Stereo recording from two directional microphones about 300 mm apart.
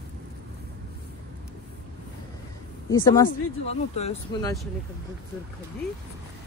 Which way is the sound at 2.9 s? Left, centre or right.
Centre.